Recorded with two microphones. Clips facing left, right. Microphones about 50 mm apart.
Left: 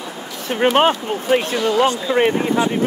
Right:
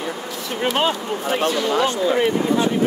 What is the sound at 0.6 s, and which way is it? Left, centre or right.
Speech, left.